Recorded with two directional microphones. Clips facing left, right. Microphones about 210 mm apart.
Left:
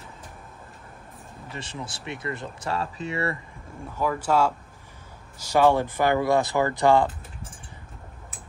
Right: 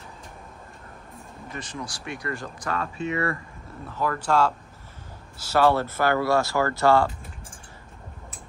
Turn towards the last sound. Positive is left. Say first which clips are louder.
# even
turn(degrees=15)  # may be behind; listen again after turning